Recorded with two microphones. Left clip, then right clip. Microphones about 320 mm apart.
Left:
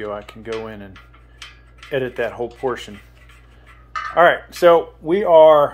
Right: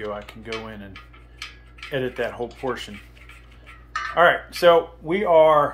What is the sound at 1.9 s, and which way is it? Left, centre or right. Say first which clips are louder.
Speech: left 4 dB; centre.